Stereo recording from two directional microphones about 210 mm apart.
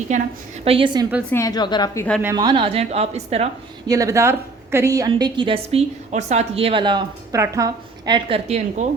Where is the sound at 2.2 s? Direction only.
15° right (ahead or behind).